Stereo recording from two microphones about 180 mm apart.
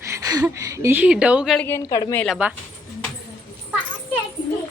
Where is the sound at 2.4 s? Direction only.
10° right (ahead or behind).